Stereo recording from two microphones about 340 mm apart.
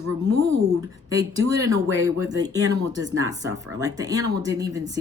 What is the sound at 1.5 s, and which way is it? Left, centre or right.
Speech, centre.